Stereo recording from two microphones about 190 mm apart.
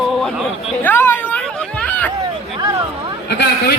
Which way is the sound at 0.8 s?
10° left (ahead or behind).